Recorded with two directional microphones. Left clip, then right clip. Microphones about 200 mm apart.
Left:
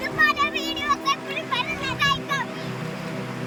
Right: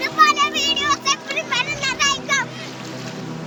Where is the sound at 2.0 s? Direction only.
15° right (ahead or behind).